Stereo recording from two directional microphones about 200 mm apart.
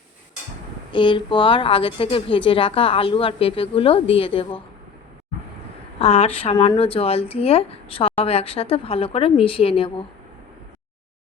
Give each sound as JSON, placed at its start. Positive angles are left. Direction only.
{"t": 0.9, "sound": "speech", "side_deg": 25}
{"t": 6.0, "sound": "speech", "side_deg": 30}